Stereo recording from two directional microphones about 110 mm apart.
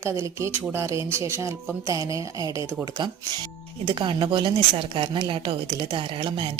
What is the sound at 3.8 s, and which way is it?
Speech, 50° right (ahead or behind).